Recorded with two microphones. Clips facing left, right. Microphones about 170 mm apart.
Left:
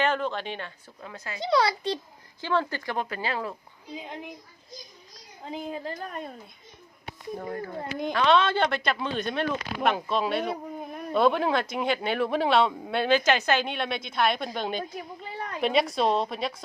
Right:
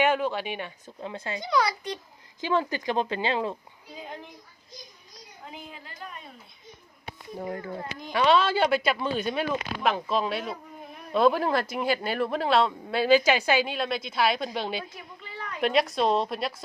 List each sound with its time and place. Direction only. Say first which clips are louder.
0.0 s speech: right 2 dB; 10° right (ahead or behind)
1.0 s speech: right 5 dB; 25° right (ahead or behind)
1.4 s a child's voice: left 3 dB; 30° left (ahead or behind)
2.4 s speech: right 1 dB; 15° right (ahead or behind)
3.9 s a child's voice: left 2 dB; 20° left (ahead or behind)
5.5 s a woman's voice: left 11 dB; 40° left (ahead or behind)
8.1 s a woman's voice: right 1 dB; 10° right (ahead or behind)
14.8 s a sound: left 4 dB; 45° left (ahead or behind)
15.6 s a woman's voice: even; centre (ahead or behind)